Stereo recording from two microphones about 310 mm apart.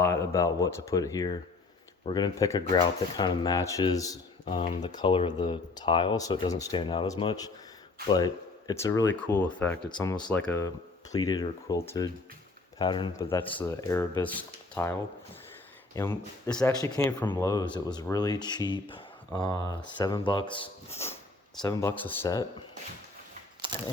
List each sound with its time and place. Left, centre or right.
0.0 s speech: centre
16.0 s speech: centre